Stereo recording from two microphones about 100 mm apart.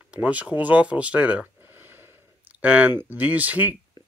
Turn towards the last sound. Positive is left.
turn(degrees=-40)  # may be behind; listen again after turning